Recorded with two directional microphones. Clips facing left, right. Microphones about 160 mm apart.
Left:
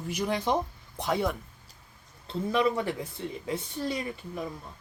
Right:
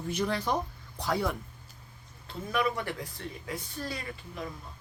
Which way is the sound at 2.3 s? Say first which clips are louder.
Left 4 dB; 25° left (ahead or behind).